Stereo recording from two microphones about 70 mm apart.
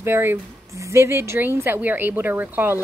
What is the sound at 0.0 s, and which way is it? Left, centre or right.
A woman's voice, right.